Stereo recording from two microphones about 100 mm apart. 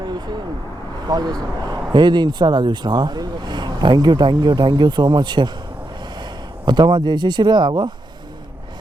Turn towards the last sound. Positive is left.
turn(degrees=-50)  # may be behind; listen again after turning